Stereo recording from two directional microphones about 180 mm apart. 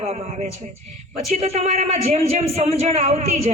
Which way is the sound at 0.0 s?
35° right (ahead or behind).